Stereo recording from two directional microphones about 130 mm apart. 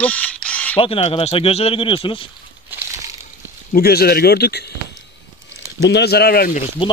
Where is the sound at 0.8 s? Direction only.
45° left (ahead or behind).